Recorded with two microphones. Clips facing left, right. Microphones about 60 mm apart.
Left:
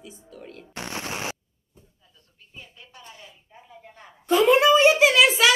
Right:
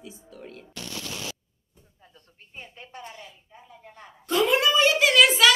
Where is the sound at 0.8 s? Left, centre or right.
Left.